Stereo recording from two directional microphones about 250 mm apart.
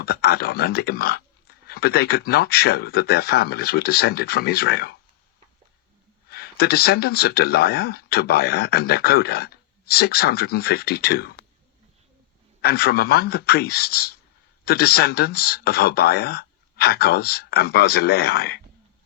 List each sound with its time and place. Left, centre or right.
0.0 s speech: left
6.2 s speech: left
12.6 s speech: left